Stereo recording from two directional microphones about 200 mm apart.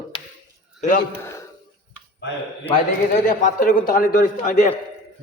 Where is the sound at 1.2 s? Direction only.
15° left (ahead or behind).